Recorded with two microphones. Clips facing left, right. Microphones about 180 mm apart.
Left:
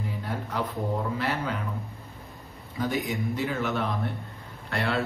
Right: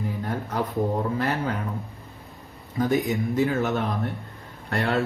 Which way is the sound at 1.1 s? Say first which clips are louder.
Right 3 dB; 45° right (ahead or behind).